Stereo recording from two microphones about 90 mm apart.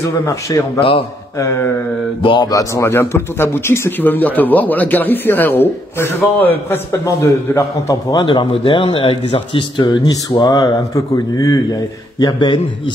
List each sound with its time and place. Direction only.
0.3 s a man's voice: 35° left (ahead or behind)
0.7 s a man's voice: 90° left
1.4 s a man's voice: 30° left (ahead or behind)
7.1 s a man's voice: 35° left (ahead or behind)
8.1 s a man's voice: 55° left (ahead or behind)
8.5 s a man's voice: 80° left; by 11.6 s 40° left (ahead or behind)
12.2 s a man's voice: 55° left (ahead or behind)